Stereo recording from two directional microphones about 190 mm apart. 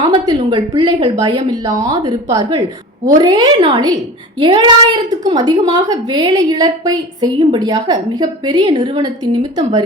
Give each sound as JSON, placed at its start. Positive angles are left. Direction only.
{"t": 0.0, "sound": "a woman's voice", "side_deg": -25}